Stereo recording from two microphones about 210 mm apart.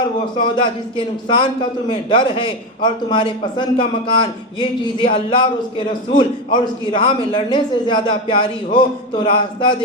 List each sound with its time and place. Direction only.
0.3 s a man's voice: 25° left (ahead or behind)